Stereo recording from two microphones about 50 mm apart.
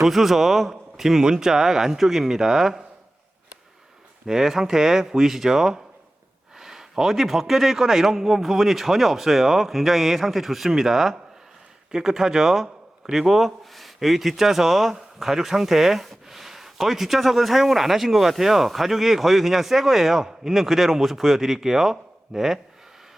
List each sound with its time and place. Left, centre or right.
0.0 s a man's voice: centre
4.3 s a man's voice: centre